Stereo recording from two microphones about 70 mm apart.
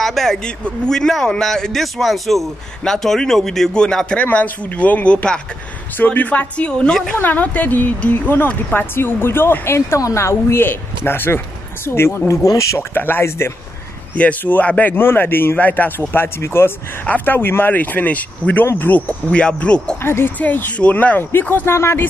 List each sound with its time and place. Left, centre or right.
0.0 s a man's voice: centre; by 12.2 s left
12.4 s speech: left
12.9 s speech: left
16.1 s a woman's voice: left
17.0 s speech: left
20.0 s a woman's voice: left
21.7 s a woman's voice: left